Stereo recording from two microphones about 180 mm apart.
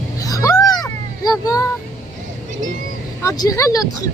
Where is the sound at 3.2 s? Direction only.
15° left (ahead or behind).